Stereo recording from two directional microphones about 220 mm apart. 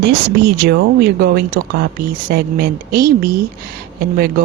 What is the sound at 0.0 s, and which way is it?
Speech, 50° right (ahead or behind).